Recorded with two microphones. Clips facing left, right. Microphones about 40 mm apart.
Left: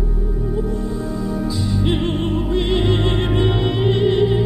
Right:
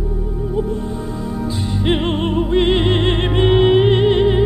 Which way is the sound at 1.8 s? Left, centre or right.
Right.